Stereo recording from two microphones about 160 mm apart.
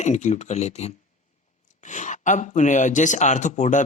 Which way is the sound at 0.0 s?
50° left (ahead or behind).